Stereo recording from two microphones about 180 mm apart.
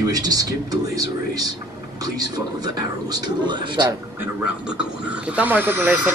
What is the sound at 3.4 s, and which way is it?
Speech, 25° right (ahead or behind).